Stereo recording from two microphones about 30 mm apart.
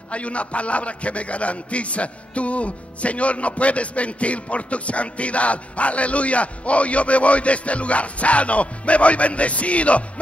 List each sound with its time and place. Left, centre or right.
0.1 s a man's voice: left